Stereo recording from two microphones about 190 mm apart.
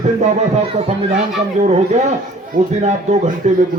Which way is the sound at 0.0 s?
35° right (ahead or behind).